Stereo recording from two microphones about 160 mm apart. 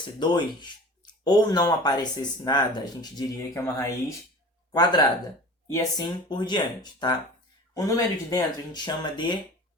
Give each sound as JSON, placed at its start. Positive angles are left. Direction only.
{"t": 0.2, "sound": "speech", "side_deg": 30}